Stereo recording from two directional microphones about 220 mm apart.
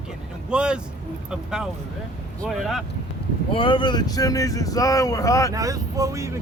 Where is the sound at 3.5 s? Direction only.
20° left (ahead or behind).